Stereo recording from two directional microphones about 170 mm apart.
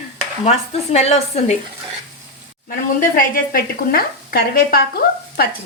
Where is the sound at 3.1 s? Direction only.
60° left (ahead or behind).